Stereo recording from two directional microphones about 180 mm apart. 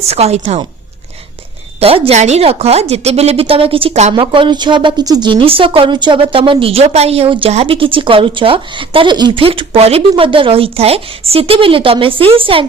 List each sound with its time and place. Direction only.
0.1 s a woman's voice: 35° right (ahead or behind)
1.8 s a woman's voice: 30° right (ahead or behind)